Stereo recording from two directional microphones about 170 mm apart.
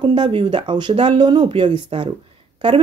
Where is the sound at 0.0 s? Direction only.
30° right (ahead or behind).